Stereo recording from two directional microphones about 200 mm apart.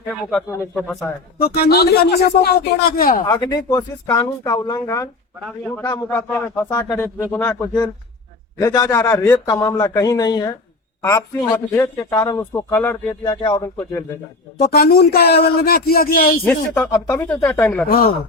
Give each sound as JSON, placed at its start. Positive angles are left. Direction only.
{"t": 0.1, "sound": "a man's voice", "side_deg": 5}
{"t": 1.4, "sound": "a man's voice", "side_deg": 50}
{"t": 3.2, "sound": "a man's voice", "side_deg": 20}
{"t": 5.5, "sound": "a man's voice", "side_deg": 0}
{"t": 5.8, "sound": "speech", "side_deg": 20}
{"t": 6.1, "sound": "a man's voice", "side_deg": 10}
{"t": 13.2, "sound": "speech", "side_deg": 25}
{"t": 14.7, "sound": "a man's voice", "side_deg": 50}
{"t": 16.7, "sound": "a man's voice", "side_deg": 10}